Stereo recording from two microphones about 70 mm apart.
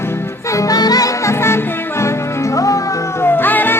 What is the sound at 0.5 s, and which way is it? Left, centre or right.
Music, left.